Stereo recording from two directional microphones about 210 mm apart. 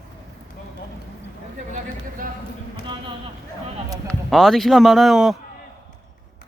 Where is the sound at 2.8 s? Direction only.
25° right (ahead or behind).